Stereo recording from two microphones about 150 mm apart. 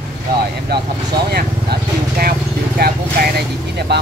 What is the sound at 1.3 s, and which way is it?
Speech, 85° right.